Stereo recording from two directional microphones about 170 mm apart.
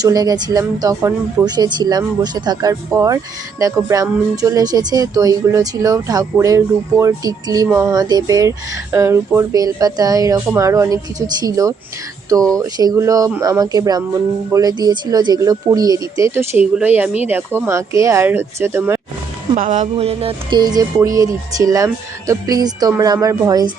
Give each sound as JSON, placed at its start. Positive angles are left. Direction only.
{"t": 0.0, "sound": "speech", "side_deg": -20}
{"t": 19.5, "sound": "speech", "side_deg": -45}